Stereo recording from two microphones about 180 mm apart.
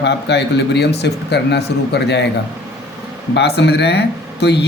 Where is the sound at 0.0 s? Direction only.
70° left (ahead or behind).